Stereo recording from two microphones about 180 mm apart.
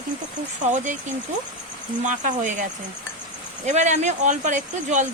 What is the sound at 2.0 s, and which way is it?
Speech, 45° right (ahead or behind).